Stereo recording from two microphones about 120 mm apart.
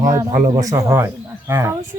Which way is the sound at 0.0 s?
30° right (ahead or behind).